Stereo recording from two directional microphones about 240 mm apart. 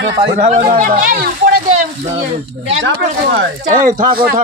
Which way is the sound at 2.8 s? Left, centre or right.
Right.